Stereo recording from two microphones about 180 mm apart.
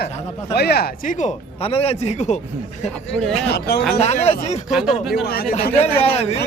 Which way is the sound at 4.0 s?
35° left (ahead or behind).